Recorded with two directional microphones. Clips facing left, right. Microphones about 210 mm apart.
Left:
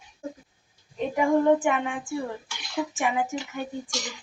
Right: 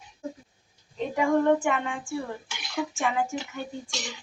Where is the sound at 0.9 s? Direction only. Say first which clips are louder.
Left 1 dB; 15° left (ahead or behind).